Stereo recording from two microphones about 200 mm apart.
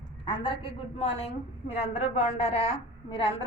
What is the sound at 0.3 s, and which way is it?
A woman's voice, 25° left (ahead or behind).